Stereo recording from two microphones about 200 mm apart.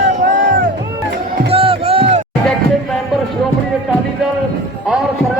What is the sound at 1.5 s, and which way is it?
Music, 25° right (ahead or behind).